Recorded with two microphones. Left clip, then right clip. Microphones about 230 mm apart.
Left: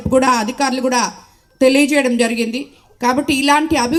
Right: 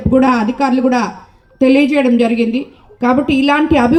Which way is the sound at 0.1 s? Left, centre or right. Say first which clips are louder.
Right 1 dB; left.